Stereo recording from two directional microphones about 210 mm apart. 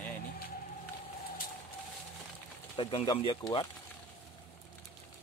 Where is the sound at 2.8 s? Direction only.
25° left (ahead or behind).